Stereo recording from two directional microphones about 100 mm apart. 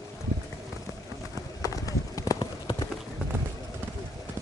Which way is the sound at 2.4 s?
55° left (ahead or behind).